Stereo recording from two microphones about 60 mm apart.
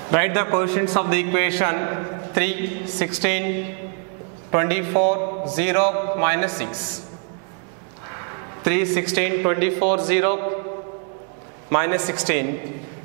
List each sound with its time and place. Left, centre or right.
0.1 s a man's voice: centre
8.6 s a man's voice: centre
11.7 s a man's voice: centre